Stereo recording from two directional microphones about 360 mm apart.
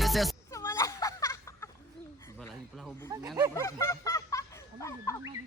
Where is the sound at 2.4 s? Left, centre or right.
Centre.